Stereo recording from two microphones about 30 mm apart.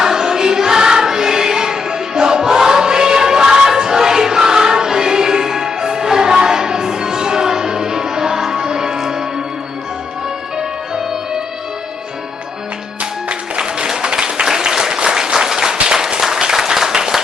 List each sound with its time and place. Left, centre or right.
0.0 s choir: centre
9.0 s music: centre
13.6 s applause: right